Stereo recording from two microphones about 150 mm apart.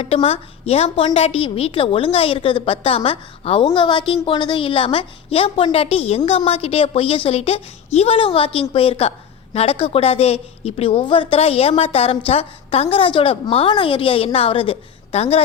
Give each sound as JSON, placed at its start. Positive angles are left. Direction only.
{"t": 0.0, "sound": "a woman's voice", "side_deg": 45}